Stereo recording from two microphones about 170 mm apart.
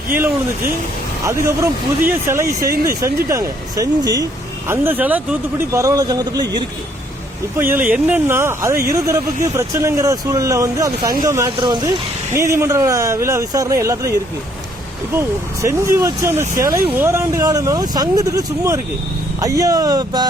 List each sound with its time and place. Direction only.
1.2 s speech: 15° right (ahead or behind)
7.6 s speech: 10° right (ahead or behind); by 11.9 s 25° right (ahead or behind)
12.3 s speech: 15° right (ahead or behind)
15.6 s speech: 15° right (ahead or behind)